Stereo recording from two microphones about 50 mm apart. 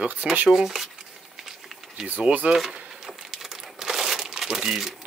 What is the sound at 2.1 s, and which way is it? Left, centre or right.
Speech, right.